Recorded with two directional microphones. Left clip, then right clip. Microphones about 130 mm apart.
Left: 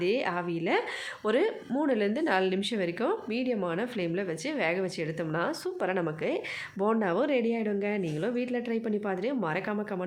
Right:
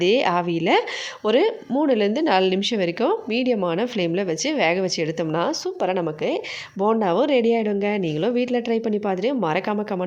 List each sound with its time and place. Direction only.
0.0 s speech: 50° right (ahead or behind)
5.5 s speech: 30° right (ahead or behind); by 10.0 s 50° right (ahead or behind)